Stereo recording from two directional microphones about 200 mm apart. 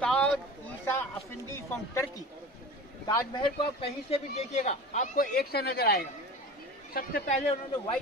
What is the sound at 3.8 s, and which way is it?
Speech, 30° left (ahead or behind).